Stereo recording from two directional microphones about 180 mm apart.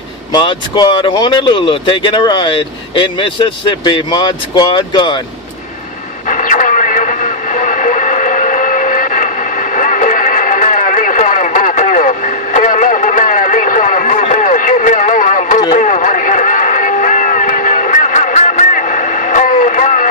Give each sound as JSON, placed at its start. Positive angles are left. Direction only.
{"t": 0.3, "sound": "speech", "side_deg": 25}
{"t": 6.2, "sound": "radio", "side_deg": 45}
{"t": 15.7, "sound": "a sound", "side_deg": 45}